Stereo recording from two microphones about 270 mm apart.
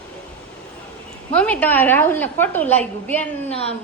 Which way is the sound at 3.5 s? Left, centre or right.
Left.